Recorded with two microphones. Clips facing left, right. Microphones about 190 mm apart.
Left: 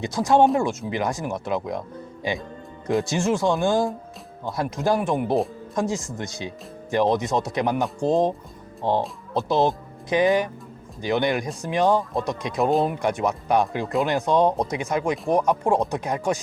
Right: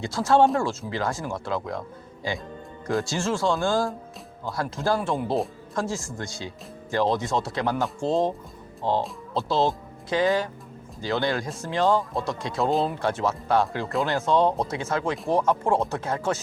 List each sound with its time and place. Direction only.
0.0 s speech: 15° left (ahead or behind)